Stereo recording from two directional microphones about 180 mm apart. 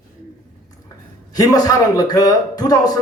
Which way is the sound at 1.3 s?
20° left (ahead or behind).